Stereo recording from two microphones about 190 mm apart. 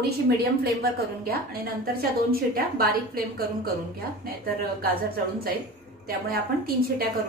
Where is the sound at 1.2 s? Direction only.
50° right (ahead or behind).